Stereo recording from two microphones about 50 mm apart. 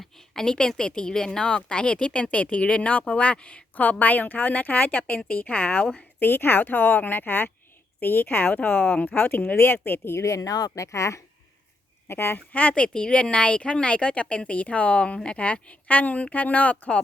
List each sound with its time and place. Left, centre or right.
0.0 s a sound: centre
0.8 s speech: centre
3.8 s a woman's voice: left
6.1 s a woman's voice: left
8.5 s a woman's voice: left
9.6 s speech: left
10.2 s speech: left
12.0 s speech: left
12.5 s speech: left